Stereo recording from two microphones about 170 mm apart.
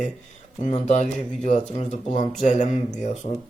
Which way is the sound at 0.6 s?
45° left (ahead or behind).